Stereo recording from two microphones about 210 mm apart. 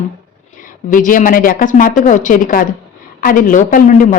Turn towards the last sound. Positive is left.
turn(degrees=35)  # may be behind; listen again after turning